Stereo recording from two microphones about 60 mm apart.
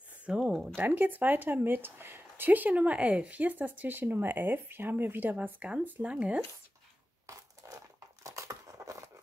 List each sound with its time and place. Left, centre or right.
0.3 s speech: centre
0.7 s speech: right
7.2 s crumpling: right